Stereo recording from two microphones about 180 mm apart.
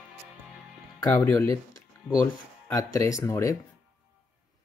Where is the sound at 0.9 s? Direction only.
15° left (ahead or behind).